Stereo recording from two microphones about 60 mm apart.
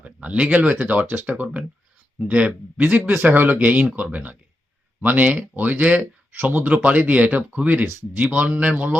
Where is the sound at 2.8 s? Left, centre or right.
Right.